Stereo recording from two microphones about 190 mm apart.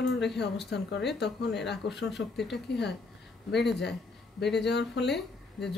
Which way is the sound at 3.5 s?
65° left (ahead or behind).